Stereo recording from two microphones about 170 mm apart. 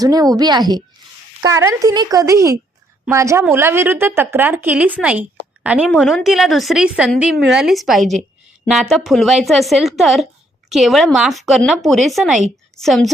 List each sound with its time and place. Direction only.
0.0 s a woman's voice: 20° right (ahead or behind); by 13.1 s centre (ahead or behind)